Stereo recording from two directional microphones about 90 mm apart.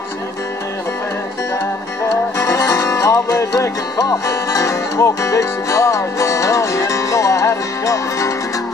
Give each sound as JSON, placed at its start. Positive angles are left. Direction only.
{"t": 2.3, "sound": "music", "side_deg": 35}